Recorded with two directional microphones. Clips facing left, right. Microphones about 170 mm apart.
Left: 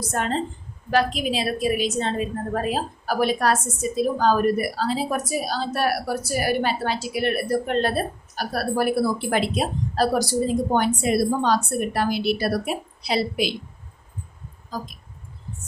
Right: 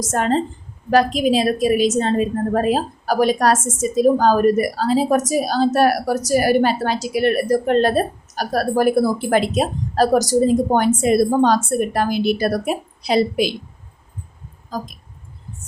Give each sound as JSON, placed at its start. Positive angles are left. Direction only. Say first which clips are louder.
{"t": 0.0, "sound": "a woman's voice", "louder": "right 6 dB", "side_deg": -40}
{"t": 14.7, "sound": "a woman's voice", "louder": "right 4 dB", "side_deg": -45}